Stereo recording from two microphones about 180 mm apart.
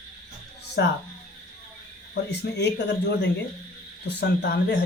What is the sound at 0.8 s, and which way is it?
Speech, 70° left (ahead or behind).